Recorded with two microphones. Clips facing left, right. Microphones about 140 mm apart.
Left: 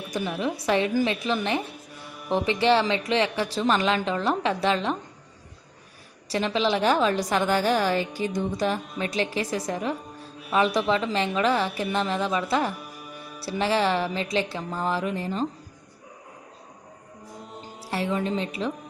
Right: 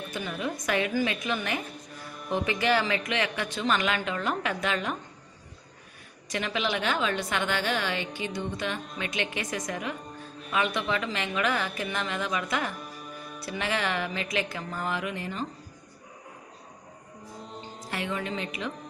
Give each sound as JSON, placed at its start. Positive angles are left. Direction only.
{"t": 0.2, "sound": "a woman's voice", "side_deg": 5}
{"t": 0.6, "sound": "a woman's voice", "side_deg": 30}
{"t": 2.0, "sound": "music", "side_deg": 5}
{"t": 2.3, "sound": "a woman's voice", "side_deg": 30}
{"t": 6.2, "sound": "a woman's voice", "side_deg": 30}
{"t": 12.7, "sound": "music", "side_deg": 5}
{"t": 13.4, "sound": "a woman's voice", "side_deg": 30}
{"t": 17.5, "sound": "music", "side_deg": 5}
{"t": 17.9, "sound": "a woman's voice", "side_deg": 35}